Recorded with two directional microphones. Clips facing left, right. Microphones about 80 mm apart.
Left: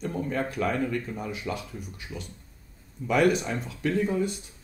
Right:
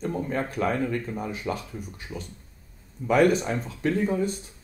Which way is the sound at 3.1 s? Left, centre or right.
Right.